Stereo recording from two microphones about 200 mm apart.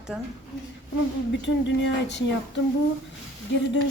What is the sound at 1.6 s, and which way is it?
Speech, 65° left (ahead or behind).